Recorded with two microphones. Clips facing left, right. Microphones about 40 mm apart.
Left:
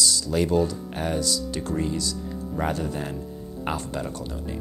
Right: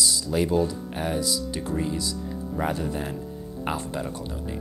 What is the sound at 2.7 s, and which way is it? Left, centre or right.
Speech, centre.